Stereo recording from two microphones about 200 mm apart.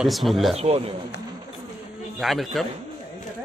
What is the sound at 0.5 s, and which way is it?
Speech, 30° right (ahead or behind).